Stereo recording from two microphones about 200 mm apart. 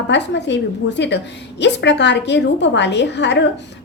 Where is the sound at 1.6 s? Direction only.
60° left (ahead or behind).